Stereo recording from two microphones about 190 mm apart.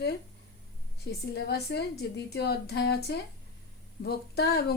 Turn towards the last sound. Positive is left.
turn(degrees=55)  # may be behind; listen again after turning